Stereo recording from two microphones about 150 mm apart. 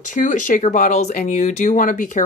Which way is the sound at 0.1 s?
55° left (ahead or behind).